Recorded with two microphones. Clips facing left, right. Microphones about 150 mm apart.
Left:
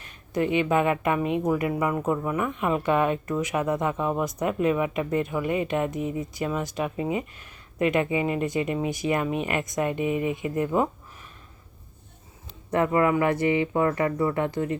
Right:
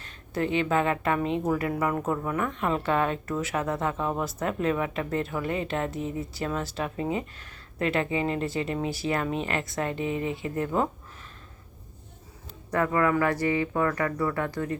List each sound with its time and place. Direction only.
0.0 s speech: 15° left (ahead or behind)
12.7 s speech: 20° left (ahead or behind)